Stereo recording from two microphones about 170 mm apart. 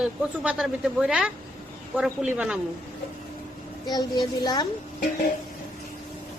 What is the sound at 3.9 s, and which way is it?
Speech, 25° left (ahead or behind).